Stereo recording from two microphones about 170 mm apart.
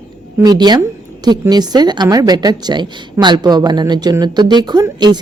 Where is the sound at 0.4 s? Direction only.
25° right (ahead or behind).